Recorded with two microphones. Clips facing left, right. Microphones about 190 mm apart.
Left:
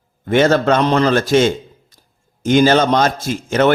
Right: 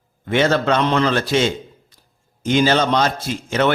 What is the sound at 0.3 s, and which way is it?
A man's voice, 45° left (ahead or behind).